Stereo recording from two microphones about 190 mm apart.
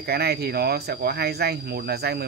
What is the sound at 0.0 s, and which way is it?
Speech, 55° right (ahead or behind).